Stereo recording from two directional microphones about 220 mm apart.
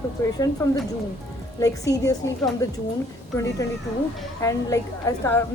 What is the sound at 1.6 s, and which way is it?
Speech, 15° left (ahead or behind).